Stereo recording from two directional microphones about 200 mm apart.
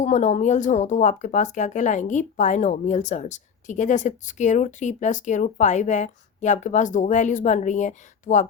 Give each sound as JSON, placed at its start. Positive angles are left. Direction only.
{"t": 0.0, "sound": "speech", "side_deg": 35}